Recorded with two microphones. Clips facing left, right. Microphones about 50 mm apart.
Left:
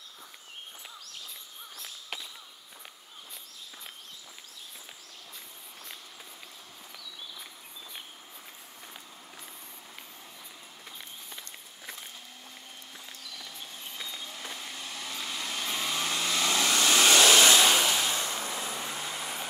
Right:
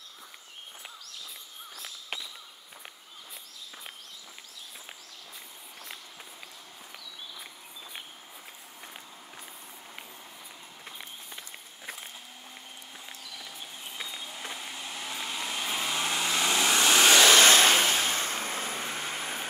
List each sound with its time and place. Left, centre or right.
13.3 s vehicle: centre
17.0 s vehicle: right